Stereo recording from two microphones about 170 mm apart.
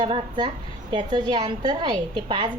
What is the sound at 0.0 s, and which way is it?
A woman's voice, 30° right (ahead or behind).